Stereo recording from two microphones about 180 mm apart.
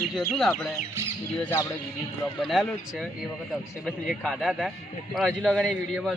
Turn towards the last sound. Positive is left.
turn(degrees=0)  # may be behind; listen again after turning